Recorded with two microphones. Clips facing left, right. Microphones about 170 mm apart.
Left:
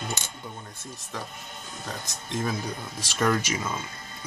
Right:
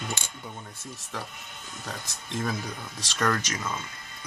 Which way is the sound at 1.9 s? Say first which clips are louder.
Left 2 dB; centre (ahead or behind).